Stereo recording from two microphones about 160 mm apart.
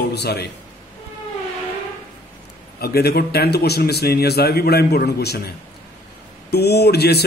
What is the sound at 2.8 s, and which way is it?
Speech, 80° left.